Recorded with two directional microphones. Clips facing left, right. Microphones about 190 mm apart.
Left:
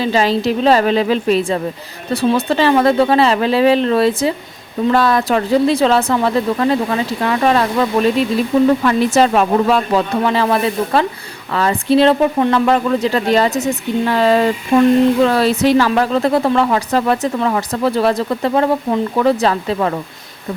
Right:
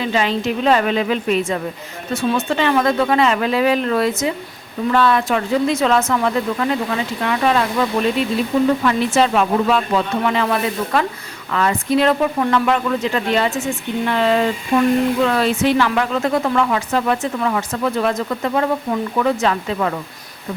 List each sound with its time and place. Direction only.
0.0 s speech: 35° left (ahead or behind)
8.8 s speech: 40° left (ahead or behind)